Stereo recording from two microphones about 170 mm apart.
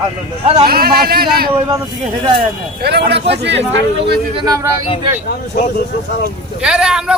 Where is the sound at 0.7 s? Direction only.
65° right (ahead or behind).